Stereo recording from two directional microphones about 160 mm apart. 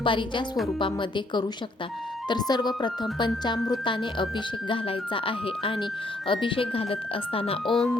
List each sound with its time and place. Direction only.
0.0 s a woman's voice: 30° left (ahead or behind)
7.7 s speech: centre (ahead or behind)